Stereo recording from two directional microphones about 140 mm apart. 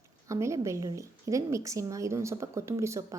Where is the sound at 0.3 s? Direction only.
20° right (ahead or behind).